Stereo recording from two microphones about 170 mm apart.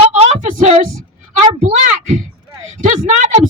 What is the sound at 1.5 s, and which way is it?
Speech, 40° right (ahead or behind).